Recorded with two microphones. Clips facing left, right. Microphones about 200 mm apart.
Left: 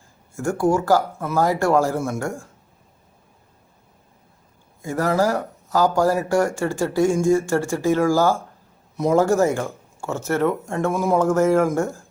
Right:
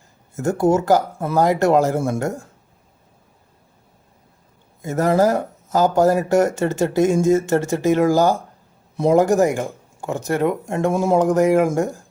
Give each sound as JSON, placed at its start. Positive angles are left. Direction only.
{"t": 0.3, "sound": "speech", "side_deg": -20}
{"t": 4.8, "sound": "speech", "side_deg": -20}